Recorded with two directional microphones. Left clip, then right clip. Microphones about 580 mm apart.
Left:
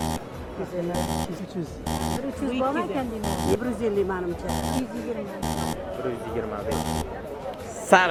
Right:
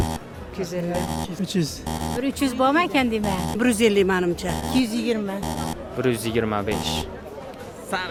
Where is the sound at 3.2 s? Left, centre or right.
Centre.